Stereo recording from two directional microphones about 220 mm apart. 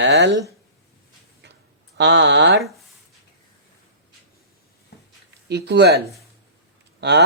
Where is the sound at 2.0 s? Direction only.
55° right (ahead or behind).